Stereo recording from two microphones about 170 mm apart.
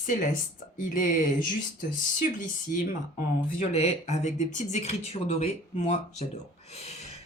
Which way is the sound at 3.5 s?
40° left (ahead or behind).